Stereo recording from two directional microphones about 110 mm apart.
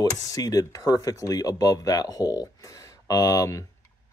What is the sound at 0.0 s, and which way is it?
Speech, 30° left (ahead or behind).